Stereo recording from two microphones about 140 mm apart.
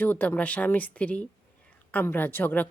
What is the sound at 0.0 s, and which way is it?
A woman's voice, 10° left (ahead or behind).